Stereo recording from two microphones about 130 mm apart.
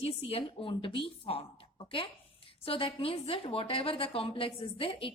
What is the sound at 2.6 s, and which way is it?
A woman's voice, 45° left (ahead or behind).